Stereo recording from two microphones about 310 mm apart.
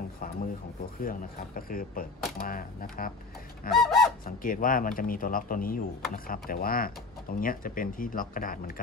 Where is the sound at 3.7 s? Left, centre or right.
Centre.